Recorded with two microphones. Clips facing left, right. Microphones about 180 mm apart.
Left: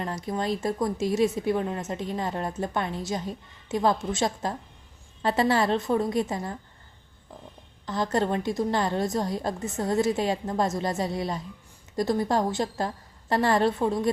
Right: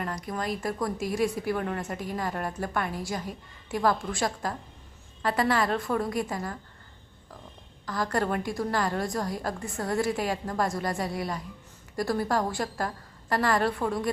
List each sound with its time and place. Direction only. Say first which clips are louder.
0.0 s a woman's voice: left 3 dB; 25° left (ahead or behind)
7.9 s a woman's voice: left 2 dB; 25° left (ahead or behind)